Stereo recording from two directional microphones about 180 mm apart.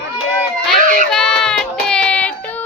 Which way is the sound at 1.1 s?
5° left (ahead or behind).